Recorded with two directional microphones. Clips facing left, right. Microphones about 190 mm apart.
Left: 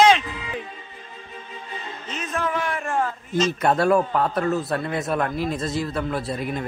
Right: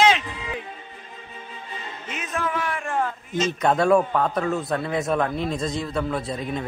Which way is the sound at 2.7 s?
40° left (ahead or behind).